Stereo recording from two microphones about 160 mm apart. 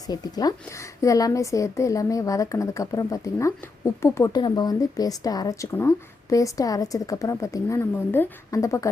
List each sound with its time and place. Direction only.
0.1 s a woman's voice: 25° left (ahead or behind)